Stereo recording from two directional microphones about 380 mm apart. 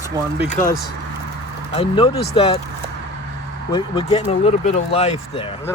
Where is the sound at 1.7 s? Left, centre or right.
Centre.